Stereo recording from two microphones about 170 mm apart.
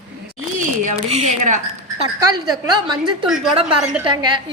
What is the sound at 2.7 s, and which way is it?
A woman's voice, 25° right (ahead or behind).